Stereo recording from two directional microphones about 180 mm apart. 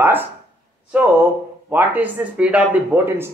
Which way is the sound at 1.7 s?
10° right (ahead or behind).